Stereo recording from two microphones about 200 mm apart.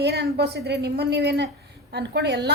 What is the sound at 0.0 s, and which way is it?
A woman's voice, 55° right (ahead or behind).